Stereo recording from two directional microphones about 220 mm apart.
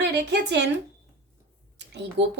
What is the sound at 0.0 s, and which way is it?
Speech, 55° right (ahead or behind).